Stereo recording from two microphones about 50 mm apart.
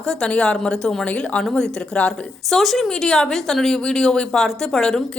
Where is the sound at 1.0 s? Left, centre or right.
Left.